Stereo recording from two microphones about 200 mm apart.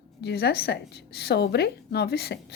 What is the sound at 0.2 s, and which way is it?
A woman's voice, 55° left (ahead or behind).